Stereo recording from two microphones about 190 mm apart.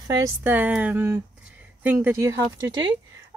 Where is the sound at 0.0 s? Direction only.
15° right (ahead or behind).